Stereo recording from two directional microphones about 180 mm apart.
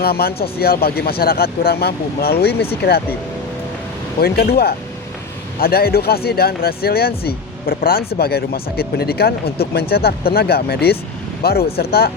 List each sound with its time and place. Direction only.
0.0 s speech: 60° left (ahead or behind)
4.2 s speech: 60° left (ahead or behind)